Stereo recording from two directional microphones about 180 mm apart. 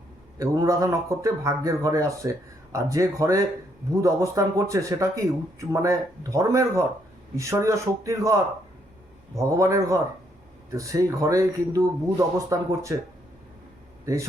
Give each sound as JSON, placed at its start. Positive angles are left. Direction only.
{"t": 0.3, "sound": "speech", "side_deg": -15}
{"t": 14.0, "sound": "a man's voice", "side_deg": -15}